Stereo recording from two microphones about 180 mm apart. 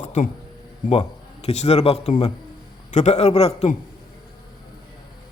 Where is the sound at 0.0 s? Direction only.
40° left (ahead or behind).